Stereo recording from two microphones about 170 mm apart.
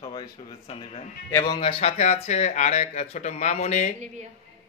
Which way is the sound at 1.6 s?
35° left (ahead or behind).